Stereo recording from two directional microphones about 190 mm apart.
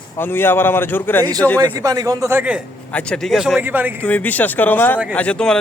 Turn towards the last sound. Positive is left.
turn(degrees=5)  # may be behind; listen again after turning